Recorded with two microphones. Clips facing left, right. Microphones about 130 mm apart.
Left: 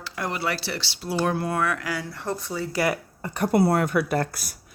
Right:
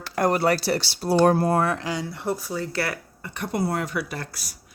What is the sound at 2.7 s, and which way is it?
Speech, 15° left (ahead or behind).